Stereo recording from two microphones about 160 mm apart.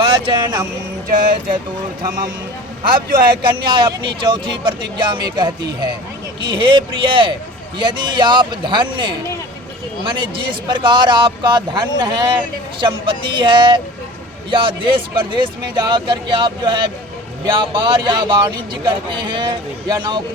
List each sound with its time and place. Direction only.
0.3 s speech: 25° right (ahead or behind)
2.8 s a man's voice: 65° right (ahead or behind)
3.5 s speech: 30° right (ahead or behind)
6.5 s speech: 30° right (ahead or behind)